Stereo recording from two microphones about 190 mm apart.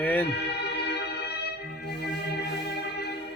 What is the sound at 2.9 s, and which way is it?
Music, 60° left (ahead or behind).